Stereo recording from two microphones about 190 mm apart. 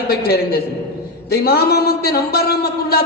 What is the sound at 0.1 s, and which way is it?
A man's voice, 55° left (ahead or behind).